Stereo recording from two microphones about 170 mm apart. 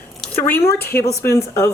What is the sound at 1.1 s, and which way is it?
Speech, 15° left (ahead or behind).